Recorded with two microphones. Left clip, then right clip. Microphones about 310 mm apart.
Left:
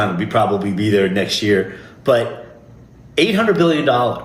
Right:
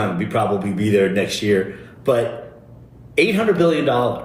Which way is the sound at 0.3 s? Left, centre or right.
Left.